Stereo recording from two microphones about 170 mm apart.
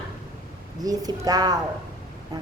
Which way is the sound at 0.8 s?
20° right (ahead or behind).